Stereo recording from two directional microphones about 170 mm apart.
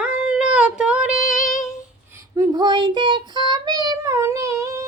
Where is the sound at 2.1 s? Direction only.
20° right (ahead or behind).